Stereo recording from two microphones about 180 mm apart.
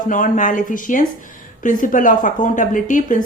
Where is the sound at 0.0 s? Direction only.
45° left (ahead or behind).